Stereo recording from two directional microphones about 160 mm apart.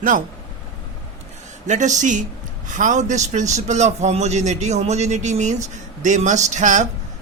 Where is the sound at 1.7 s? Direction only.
50° right (ahead or behind).